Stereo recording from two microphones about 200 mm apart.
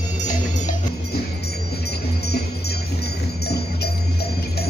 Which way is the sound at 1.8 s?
55° left (ahead or behind).